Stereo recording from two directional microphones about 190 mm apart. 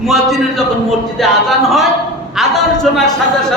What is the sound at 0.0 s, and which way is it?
A man's voice, centre (ahead or behind).